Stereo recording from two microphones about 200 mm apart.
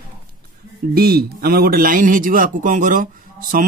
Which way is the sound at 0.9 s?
50° right (ahead or behind).